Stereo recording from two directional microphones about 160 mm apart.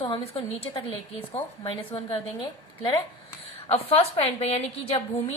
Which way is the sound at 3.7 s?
35° left (ahead or behind).